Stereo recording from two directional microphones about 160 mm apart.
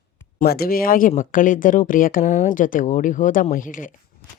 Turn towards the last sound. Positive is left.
turn(degrees=55)  # may be behind; listen again after turning